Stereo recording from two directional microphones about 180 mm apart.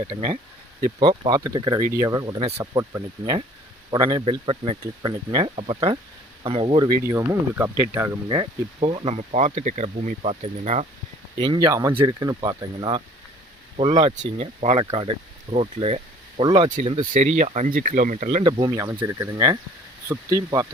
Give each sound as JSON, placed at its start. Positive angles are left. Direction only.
{"t": 0.9, "sound": "speech", "side_deg": -30}
{"t": 2.7, "sound": "speech", "side_deg": -20}
{"t": 8.3, "sound": "speech", "side_deg": -30}
{"t": 11.3, "sound": "speech", "side_deg": -25}
{"t": 13.7, "sound": "speech", "side_deg": -35}
{"t": 17.1, "sound": "speech", "side_deg": -40}